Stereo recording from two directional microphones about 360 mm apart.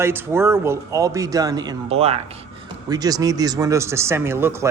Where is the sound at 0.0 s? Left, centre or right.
Centre.